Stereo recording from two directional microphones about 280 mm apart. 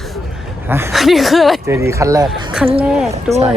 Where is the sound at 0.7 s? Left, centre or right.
Centre.